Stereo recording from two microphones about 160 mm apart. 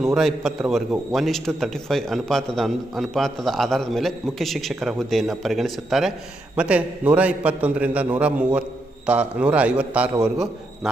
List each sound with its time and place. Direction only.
0.0 s a man's voice: centre (ahead or behind)